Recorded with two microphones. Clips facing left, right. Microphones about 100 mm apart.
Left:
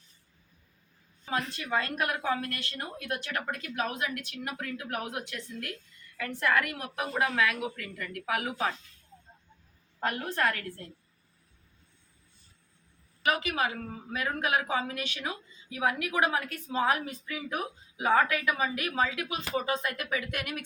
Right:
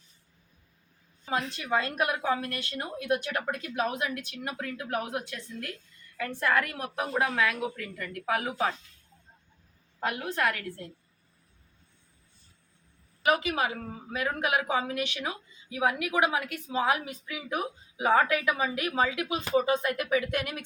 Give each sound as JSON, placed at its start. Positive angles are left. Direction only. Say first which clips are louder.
{"t": 1.4, "sound": "a woman's voice", "louder": "right 2 dB", "side_deg": -10}
{"t": 10.0, "sound": "a woman's voice", "louder": "even", "side_deg": -10}
{"t": 13.3, "sound": "a woman's voice", "louder": "right 4 dB", "side_deg": -25}